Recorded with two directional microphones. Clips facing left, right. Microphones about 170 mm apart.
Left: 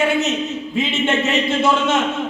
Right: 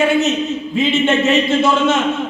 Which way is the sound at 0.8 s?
15° left (ahead or behind).